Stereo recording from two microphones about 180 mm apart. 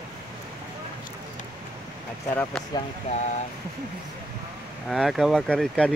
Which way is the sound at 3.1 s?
35° left (ahead or behind).